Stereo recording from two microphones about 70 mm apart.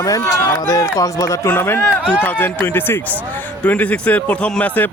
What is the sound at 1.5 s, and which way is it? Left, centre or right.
Speech, left.